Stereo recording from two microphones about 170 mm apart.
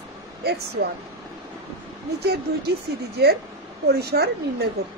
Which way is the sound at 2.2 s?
70° right (ahead or behind).